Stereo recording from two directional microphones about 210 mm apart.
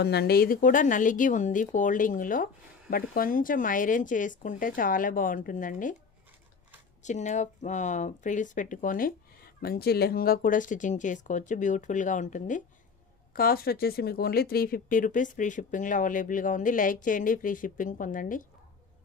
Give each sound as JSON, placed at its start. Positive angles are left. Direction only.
{"t": 0.0, "sound": "speech", "side_deg": 50}
{"t": 7.0, "sound": "speech", "side_deg": 35}